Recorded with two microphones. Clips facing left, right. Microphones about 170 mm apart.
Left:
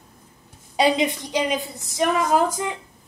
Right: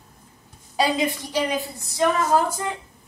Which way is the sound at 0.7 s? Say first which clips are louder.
Left 2 dB; 20° left (ahead or behind).